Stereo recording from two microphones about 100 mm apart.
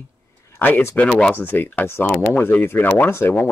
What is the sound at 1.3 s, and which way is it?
Speech, 20° left (ahead or behind).